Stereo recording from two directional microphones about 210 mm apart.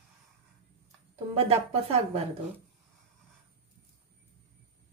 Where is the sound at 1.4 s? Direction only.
30° right (ahead or behind).